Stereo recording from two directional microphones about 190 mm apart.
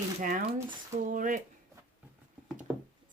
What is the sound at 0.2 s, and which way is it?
Speech, 45° right (ahead or behind).